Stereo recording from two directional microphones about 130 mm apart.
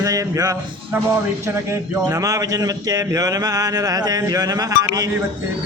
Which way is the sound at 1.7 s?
20° right (ahead or behind).